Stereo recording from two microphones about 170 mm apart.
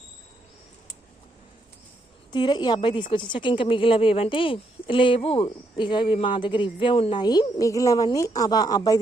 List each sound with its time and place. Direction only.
2.3 s a woman's voice: 25° left (ahead or behind)